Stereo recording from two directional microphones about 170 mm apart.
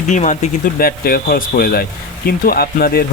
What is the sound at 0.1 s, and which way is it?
Speech, 45° left (ahead or behind).